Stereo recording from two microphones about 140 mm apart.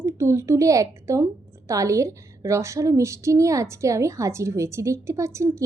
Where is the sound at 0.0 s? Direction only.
20° right (ahead or behind).